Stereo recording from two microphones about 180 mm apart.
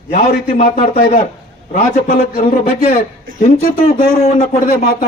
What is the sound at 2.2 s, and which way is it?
A man's voice, 40° left (ahead or behind).